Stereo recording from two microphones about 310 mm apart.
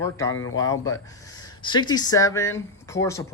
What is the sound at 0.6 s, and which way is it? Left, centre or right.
Speech, centre.